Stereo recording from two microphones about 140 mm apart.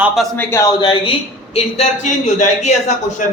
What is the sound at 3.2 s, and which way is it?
Speech, 70° left (ahead or behind).